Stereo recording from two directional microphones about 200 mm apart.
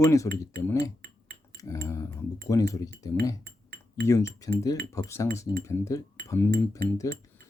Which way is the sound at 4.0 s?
15° left (ahead or behind).